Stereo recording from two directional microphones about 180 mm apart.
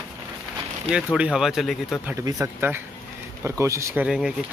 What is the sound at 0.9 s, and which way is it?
Speech, 5° right (ahead or behind).